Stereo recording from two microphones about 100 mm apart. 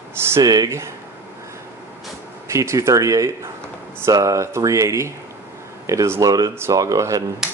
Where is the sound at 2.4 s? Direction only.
30° right (ahead or behind).